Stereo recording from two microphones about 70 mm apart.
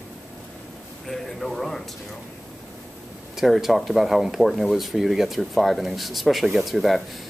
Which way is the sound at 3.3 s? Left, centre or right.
Centre.